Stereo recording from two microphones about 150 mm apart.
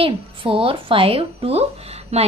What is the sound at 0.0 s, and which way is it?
A woman's voice, 35° right (ahead or behind).